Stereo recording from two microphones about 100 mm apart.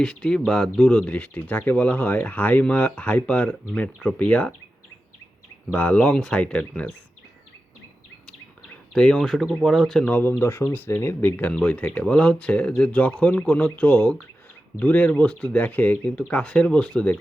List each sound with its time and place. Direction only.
0.0 s speech: 5° left (ahead or behind)
0.9 s speech: 15° left (ahead or behind)
5.7 s speech: 10° left (ahead or behind)
8.9 s speech: 5° left (ahead or behind)
10.4 s speech: 25° left (ahead or behind)